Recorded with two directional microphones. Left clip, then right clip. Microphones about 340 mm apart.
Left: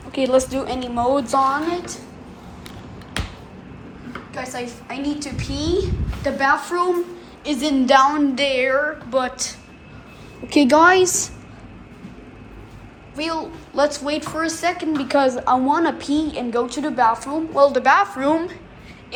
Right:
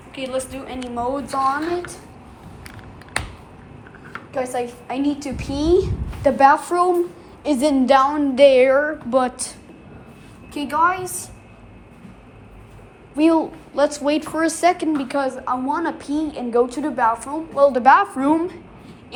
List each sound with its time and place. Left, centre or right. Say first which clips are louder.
0.1 s a woman's voice: left 8 dB; centre
0.9 s a woman's voice: left 5 dB; centre
4.4 s a woman's voice: right 6 dB; centre
10.8 s a woman's voice: left 6 dB; centre
13.1 s a woman's voice: right 8 dB; centre
15.0 s a woman's voice: left 5 dB; centre